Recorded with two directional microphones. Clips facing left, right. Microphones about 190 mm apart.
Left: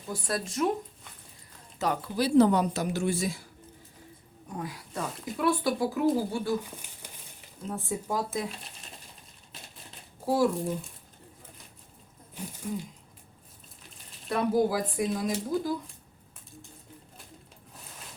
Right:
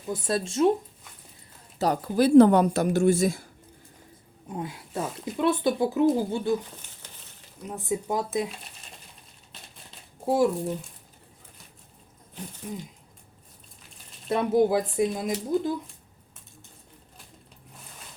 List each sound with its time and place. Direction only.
0.1 s speech: 25° right (ahead or behind)
1.8 s speech: 40° right (ahead or behind)
4.4 s speech: 25° right (ahead or behind)
7.7 s speech: 15° right (ahead or behind)
10.2 s speech: 20° right (ahead or behind)
12.6 s speech: 15° right (ahead or behind)
14.3 s speech: 25° right (ahead or behind)